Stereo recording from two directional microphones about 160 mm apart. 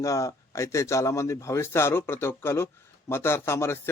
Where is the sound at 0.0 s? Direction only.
20° left (ahead or behind).